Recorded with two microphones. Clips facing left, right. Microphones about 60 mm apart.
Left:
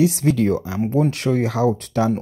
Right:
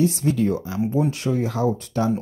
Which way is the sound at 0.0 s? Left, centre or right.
Left.